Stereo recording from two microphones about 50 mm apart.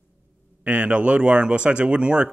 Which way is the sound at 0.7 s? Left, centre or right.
Right.